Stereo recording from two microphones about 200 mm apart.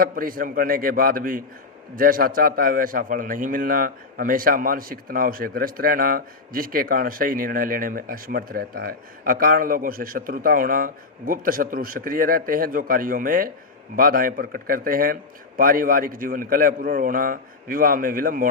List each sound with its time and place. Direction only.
0.0 s a man's voice: 45° right (ahead or behind)